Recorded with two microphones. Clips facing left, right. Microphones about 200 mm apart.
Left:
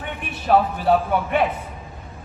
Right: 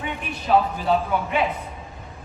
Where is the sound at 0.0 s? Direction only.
55° left (ahead or behind).